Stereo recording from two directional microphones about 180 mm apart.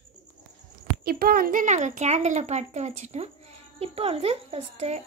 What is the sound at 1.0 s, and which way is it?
A woman's voice, 55° right (ahead or behind).